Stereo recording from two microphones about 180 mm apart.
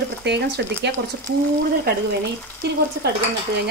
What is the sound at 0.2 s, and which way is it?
Speech, 70° right (ahead or behind).